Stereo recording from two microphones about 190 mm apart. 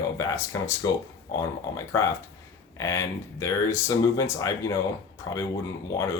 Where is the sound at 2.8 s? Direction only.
15° left (ahead or behind).